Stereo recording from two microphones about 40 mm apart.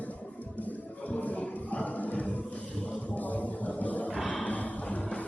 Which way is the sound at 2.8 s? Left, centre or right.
Left.